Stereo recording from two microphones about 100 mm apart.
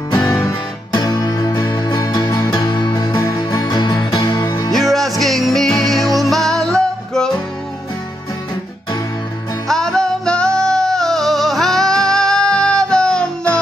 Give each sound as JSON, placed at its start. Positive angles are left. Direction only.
{"t": 0.1, "sound": "music", "side_deg": 35}
{"t": 4.7, "sound": "music", "side_deg": 0}
{"t": 9.7, "sound": "music", "side_deg": 5}